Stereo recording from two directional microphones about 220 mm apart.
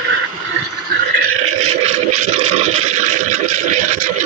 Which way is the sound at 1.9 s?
30° right (ahead or behind).